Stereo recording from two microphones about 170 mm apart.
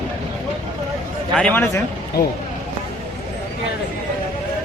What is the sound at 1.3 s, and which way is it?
Speech, 10° left (ahead or behind).